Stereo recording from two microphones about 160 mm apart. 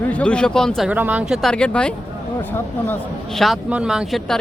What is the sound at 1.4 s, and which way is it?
Speech, 5° left (ahead or behind).